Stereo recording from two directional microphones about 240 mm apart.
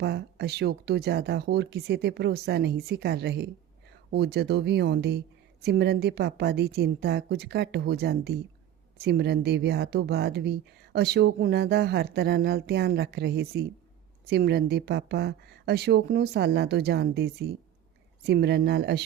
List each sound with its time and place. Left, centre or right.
0.0 s speech: right